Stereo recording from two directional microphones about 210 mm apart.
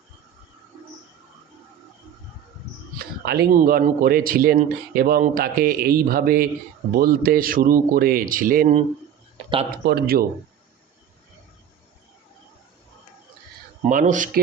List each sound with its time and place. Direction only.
3.2 s speech: 45° right (ahead or behind)
9.8 s speech: 50° right (ahead or behind)
13.8 s speech: 35° right (ahead or behind)